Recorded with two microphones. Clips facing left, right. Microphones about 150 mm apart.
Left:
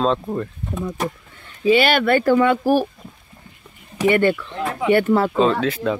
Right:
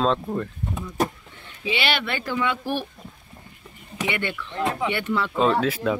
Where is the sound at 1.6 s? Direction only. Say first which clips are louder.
Left 10 dB; 45° left (ahead or behind).